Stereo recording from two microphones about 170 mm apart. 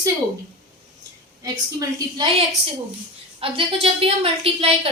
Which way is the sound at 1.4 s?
20° right (ahead or behind).